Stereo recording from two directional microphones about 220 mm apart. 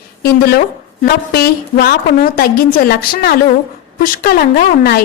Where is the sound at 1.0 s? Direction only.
45° left (ahead or behind).